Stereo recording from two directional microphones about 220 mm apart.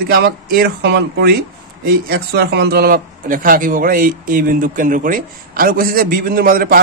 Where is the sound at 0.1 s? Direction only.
45° right (ahead or behind).